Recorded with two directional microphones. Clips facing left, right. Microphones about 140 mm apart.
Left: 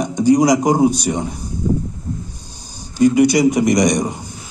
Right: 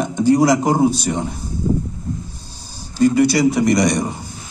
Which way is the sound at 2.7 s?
15° left (ahead or behind).